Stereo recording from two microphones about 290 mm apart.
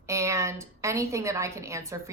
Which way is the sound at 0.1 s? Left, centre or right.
Centre.